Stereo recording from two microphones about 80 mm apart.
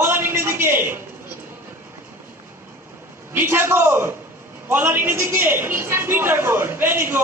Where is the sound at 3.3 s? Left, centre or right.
Right.